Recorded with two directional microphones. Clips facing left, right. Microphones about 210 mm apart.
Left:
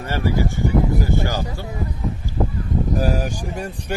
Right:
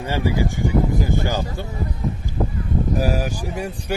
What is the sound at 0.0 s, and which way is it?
Speech, 15° right (ahead or behind).